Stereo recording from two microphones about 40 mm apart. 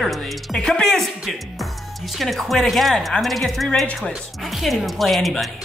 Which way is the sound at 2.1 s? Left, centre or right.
Centre.